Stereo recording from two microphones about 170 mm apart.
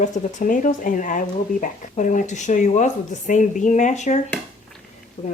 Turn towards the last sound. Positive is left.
turn(degrees=45)  # may be behind; listen again after turning